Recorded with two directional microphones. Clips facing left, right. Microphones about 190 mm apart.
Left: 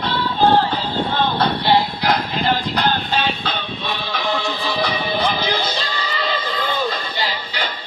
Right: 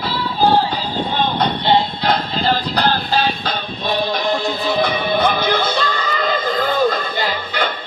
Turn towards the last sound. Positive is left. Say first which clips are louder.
# right 5 dB
turn(degrees=-50)  # may be behind; listen again after turning